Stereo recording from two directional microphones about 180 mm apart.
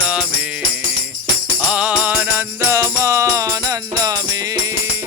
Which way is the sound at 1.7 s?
5° right (ahead or behind).